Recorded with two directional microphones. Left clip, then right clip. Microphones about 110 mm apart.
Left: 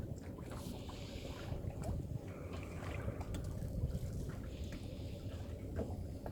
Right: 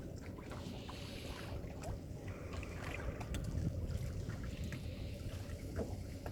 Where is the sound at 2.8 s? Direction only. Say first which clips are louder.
Right 1 dB; 35° right (ahead or behind).